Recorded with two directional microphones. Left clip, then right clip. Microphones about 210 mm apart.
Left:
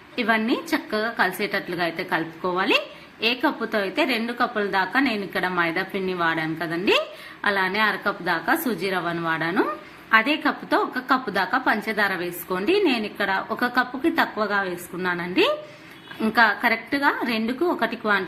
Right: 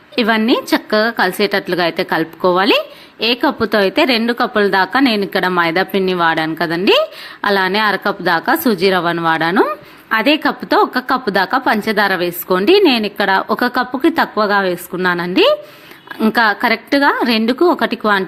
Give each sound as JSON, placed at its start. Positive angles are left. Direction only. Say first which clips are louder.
{"t": 0.2, "sound": "a woman's voice", "louder": "right 8 dB", "side_deg": -45}